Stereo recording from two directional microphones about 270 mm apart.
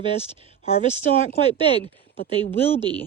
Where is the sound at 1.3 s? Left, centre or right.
Left.